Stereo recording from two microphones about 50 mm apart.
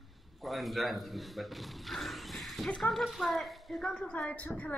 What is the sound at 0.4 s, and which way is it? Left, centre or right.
A man's voice, centre.